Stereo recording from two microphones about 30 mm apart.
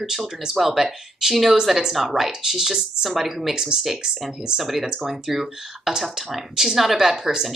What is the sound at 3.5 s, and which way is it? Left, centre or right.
Speech, right.